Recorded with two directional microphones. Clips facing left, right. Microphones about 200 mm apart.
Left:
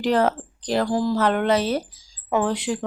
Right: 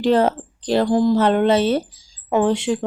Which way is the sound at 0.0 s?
25° right (ahead or behind).